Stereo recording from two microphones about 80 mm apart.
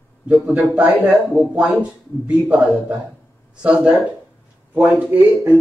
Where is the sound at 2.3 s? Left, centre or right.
Centre.